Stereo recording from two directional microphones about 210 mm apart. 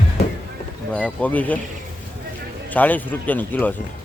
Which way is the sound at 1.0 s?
5° left (ahead or behind).